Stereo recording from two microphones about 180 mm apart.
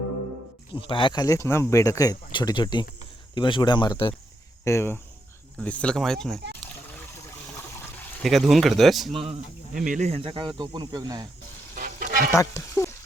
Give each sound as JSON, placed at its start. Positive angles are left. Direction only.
{"t": 0.7, "sound": "speech", "side_deg": 30}
{"t": 4.6, "sound": "speech", "side_deg": 15}
{"t": 8.2, "sound": "speech", "side_deg": 0}
{"t": 9.1, "sound": "speech", "side_deg": -35}
{"t": 9.7, "sound": "speech", "side_deg": -45}
{"t": 11.7, "sound": "frying", "side_deg": -50}
{"t": 12.3, "sound": "speech", "side_deg": 20}